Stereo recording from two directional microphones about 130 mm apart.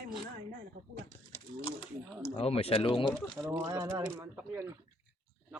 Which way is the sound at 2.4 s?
50° left (ahead or behind).